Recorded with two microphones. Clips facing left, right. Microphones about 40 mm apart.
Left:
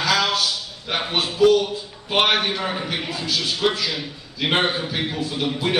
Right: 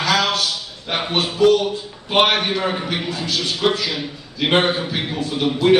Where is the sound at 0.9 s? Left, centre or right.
Centre.